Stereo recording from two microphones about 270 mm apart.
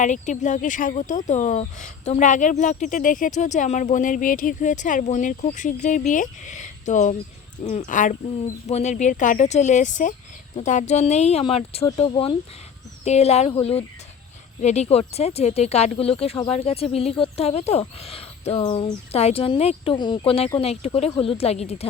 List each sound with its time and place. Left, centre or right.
0.0 s speech: left